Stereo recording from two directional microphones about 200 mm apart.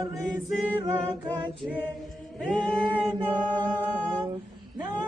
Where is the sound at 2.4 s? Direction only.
5° left (ahead or behind).